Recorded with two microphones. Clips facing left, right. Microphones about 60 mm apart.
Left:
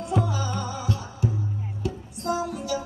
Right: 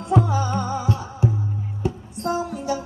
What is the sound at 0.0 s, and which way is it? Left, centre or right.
Music, right.